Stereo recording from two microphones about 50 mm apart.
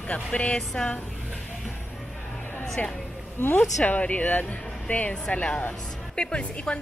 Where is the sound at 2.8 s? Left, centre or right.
Left.